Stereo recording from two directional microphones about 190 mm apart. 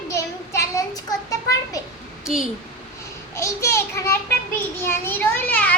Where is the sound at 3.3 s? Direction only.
15° left (ahead or behind).